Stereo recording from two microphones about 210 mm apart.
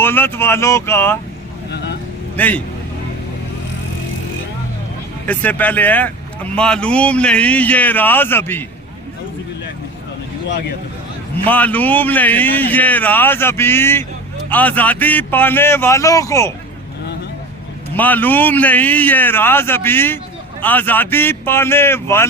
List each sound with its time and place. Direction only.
0.0 s speech: 10° left (ahead or behind)
1.7 s vehicle: 55° left (ahead or behind)
2.3 s a man's voice: 5° left (ahead or behind)
5.2 s speech: 5° left (ahead or behind)
11.4 s speech: 5° left (ahead or behind)
17.9 s speech: 10° left (ahead or behind)